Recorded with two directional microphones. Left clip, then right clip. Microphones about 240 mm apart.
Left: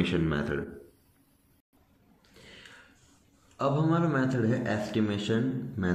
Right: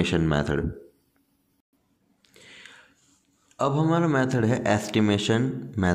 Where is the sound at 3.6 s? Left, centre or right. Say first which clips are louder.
Right 4 dB; right.